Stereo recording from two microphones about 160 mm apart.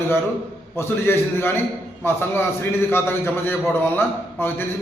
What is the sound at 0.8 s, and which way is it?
A man's voice, 15° left (ahead or behind).